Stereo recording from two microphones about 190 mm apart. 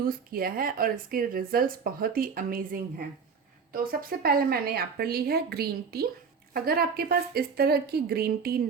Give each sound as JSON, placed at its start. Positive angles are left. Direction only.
{"t": 0.0, "sound": "speech", "side_deg": -50}
{"t": 4.2, "sound": "a woman's voice", "side_deg": -50}